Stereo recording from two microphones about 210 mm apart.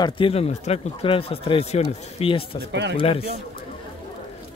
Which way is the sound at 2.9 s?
25° left (ahead or behind).